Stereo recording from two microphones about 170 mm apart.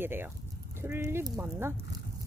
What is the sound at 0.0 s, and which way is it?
Speech, 15° right (ahead or behind).